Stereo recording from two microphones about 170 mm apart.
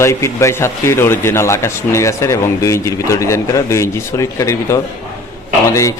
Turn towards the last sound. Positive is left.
turn(degrees=20)  # may be behind; listen again after turning